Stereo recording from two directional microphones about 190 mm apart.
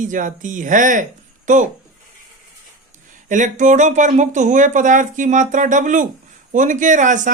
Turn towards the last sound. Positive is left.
turn(degrees=-40)  # may be behind; listen again after turning